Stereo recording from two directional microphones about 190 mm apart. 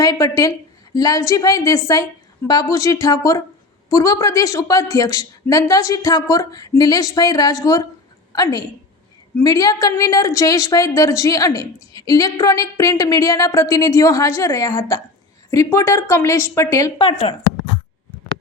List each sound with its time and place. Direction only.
0.0 s a woman's voice: 15° left (ahead or behind)
17.1 s a woman's voice: 30° left (ahead or behind)